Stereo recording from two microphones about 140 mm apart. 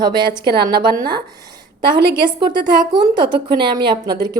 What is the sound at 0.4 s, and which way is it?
Speech, 30° right (ahead or behind).